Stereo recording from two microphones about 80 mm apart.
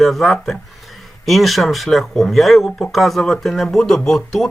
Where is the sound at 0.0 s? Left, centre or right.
Centre.